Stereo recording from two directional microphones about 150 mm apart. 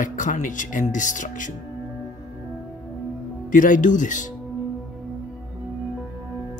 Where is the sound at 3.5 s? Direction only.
60° left (ahead or behind).